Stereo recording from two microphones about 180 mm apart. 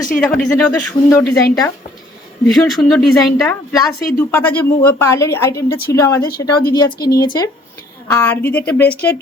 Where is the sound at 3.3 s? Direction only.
15° left (ahead or behind).